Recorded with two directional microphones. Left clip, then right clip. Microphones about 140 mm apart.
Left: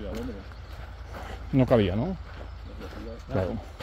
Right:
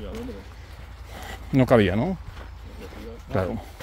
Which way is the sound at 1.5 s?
55° right (ahead or behind).